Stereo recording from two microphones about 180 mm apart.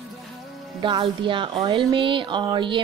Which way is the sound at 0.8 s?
30° right (ahead or behind).